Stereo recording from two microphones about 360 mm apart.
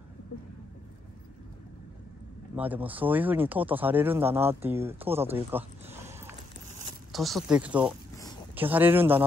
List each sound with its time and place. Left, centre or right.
2.5 s speech: centre